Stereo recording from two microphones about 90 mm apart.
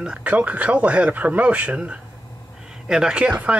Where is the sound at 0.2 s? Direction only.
15° right (ahead or behind).